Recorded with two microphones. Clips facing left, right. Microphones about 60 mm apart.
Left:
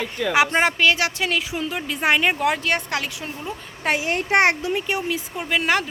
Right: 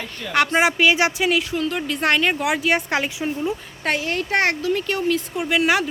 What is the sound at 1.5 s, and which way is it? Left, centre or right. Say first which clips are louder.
Speech: right 3 dB; centre.